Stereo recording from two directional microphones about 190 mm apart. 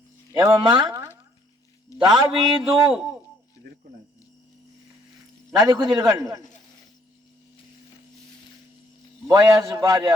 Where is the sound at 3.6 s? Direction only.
60° right (ahead or behind).